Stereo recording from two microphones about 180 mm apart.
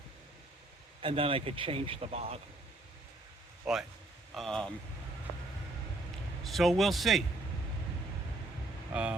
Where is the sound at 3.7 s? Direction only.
5° right (ahead or behind).